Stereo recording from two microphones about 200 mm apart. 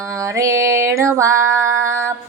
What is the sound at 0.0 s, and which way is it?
Female singing, 15° right (ahead or behind).